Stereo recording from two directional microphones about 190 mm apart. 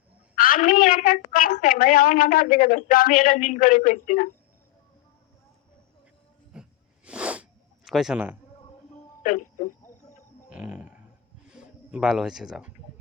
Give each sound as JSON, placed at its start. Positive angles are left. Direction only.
{"t": 0.3, "sound": "a woman's voice", "side_deg": 45}
{"t": 6.5, "sound": "a sound", "side_deg": -5}
{"t": 7.9, "sound": "a man's voice", "side_deg": 0}
{"t": 9.2, "sound": "speech", "side_deg": 45}
{"t": 10.5, "sound": "a sound", "side_deg": -5}
{"t": 11.4, "sound": "speech", "side_deg": -5}